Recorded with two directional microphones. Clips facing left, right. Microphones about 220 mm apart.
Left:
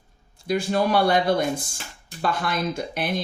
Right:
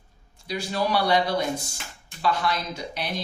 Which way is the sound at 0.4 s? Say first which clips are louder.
Left 5 dB; 50° left (ahead or behind).